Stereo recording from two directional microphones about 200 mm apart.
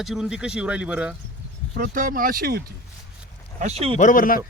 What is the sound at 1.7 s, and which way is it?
Speech, 40° right (ahead or behind).